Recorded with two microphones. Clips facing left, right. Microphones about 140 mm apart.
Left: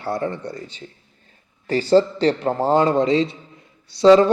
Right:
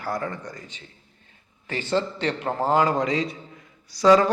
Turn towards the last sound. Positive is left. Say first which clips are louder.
# left 5 dB
turn(degrees=25)  # may be behind; listen again after turning